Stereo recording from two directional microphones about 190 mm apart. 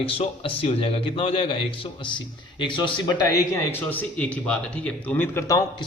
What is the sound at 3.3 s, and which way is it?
A man's voice, 15° left (ahead or behind).